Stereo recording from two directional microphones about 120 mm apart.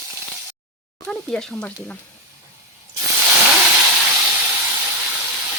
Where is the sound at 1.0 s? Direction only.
5° left (ahead or behind).